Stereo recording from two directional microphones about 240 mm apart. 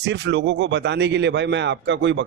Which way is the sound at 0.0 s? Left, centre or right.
Right.